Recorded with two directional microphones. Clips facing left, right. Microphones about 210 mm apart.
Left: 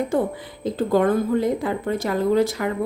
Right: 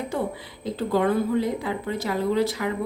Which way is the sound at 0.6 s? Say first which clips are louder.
Left 4 dB; 50° left (ahead or behind).